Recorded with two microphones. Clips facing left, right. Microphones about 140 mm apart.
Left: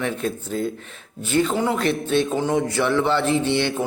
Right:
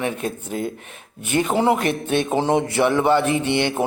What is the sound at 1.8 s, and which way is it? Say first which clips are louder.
Speech: left 1 dB; 55° right (ahead or behind).